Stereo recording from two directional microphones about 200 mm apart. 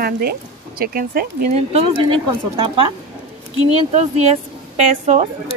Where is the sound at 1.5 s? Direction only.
30° right (ahead or behind).